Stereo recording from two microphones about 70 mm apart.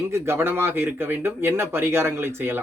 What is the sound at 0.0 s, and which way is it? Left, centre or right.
Speech, right.